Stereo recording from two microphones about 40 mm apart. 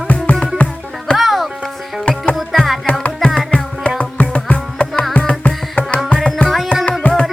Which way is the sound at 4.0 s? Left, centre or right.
Left.